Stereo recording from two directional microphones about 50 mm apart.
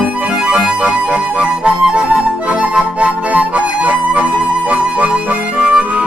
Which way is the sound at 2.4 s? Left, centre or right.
Right.